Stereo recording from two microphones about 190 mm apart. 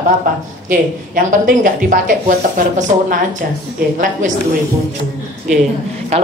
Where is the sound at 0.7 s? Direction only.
45° right (ahead or behind).